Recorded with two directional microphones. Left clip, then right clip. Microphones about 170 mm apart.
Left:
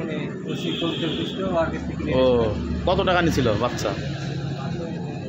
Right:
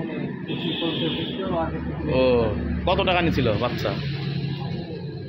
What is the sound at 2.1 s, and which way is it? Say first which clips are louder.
A man's voice: left 1 dB; 25° left (ahead or behind).